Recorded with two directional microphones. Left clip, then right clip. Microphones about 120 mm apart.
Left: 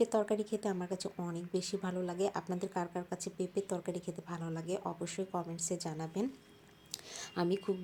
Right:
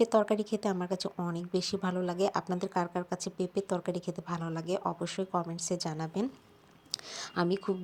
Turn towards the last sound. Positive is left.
turn(degrees=-15)  # may be behind; listen again after turning